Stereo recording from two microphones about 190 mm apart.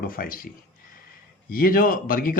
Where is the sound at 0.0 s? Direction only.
50° left (ahead or behind).